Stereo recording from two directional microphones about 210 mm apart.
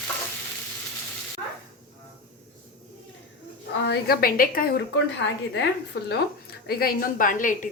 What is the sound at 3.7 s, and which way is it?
A woman's voice, 55° left (ahead or behind).